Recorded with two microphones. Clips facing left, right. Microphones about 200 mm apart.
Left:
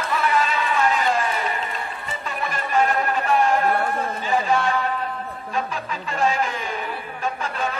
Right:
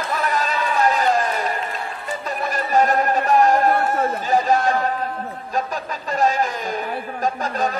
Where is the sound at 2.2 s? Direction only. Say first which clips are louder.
Right 3 dB; 40° right (ahead or behind).